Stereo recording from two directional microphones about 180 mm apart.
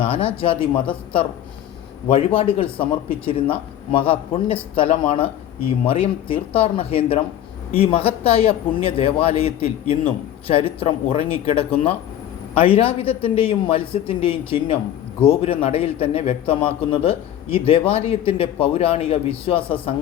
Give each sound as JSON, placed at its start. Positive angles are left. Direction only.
{"t": 0.3, "sound": "a man's voice", "side_deg": 30}